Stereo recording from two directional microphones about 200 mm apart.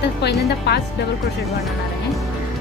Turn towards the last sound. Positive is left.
turn(degrees=55)  # may be behind; listen again after turning